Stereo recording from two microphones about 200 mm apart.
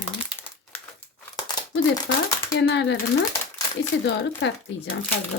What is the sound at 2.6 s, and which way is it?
Speech, 65° left (ahead or behind).